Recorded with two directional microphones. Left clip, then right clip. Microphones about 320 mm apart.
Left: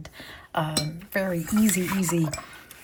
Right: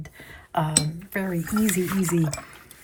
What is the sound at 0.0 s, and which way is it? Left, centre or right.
Speech, centre.